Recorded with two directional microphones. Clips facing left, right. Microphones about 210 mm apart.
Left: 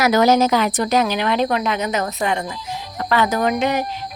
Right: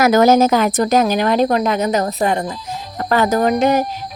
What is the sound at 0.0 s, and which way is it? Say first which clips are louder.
Speech: right 3 dB; 45° right (ahead or behind).